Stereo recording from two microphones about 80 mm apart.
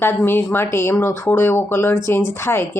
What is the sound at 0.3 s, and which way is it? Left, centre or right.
A woman's voice, left.